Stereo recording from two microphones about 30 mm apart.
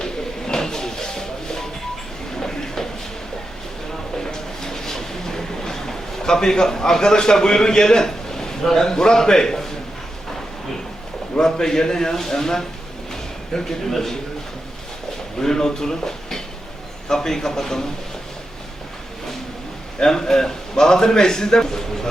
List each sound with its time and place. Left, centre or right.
0.0 s music: left
4.2 s train: centre
11.3 s a man's voice: left
15.4 s a man's voice: centre
20.0 s a man's voice: centre